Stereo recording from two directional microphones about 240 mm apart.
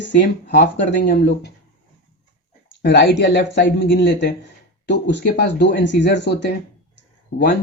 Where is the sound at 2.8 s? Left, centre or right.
Left.